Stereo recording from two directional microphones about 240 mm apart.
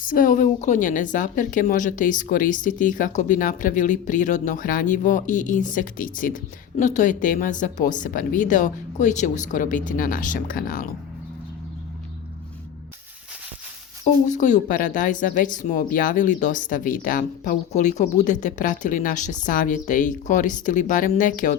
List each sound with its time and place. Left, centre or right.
0.0 s a woman's voice: left
14.3 s a woman's voice: left